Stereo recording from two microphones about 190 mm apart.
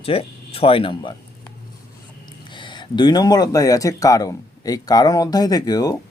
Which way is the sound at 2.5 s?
25° left (ahead or behind).